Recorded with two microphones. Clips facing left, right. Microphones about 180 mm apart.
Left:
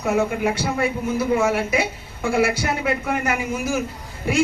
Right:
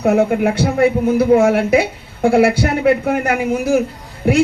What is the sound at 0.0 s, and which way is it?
A woman's voice, 60° right (ahead or behind).